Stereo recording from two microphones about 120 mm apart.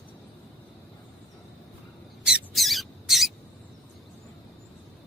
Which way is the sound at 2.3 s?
Centre (ahead or behind).